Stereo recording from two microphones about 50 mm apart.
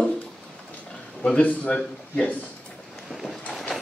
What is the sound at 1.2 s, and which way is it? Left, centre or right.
A man's voice, left.